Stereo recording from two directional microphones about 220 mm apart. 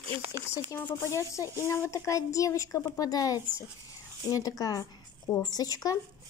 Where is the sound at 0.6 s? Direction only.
10° left (ahead or behind).